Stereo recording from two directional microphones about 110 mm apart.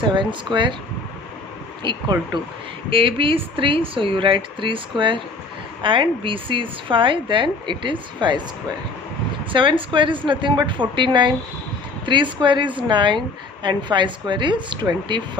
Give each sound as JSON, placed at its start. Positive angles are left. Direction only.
{"t": 0.0, "sound": "a woman's voice", "side_deg": -45}
{"t": 1.8, "sound": "a woman's voice", "side_deg": -45}
{"t": 2.9, "sound": "a woman's voice", "side_deg": -55}
{"t": 9.5, "sound": "a woman's voice", "side_deg": -50}